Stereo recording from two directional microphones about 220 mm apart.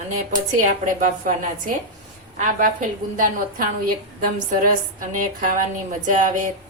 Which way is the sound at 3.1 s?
40° right (ahead or behind).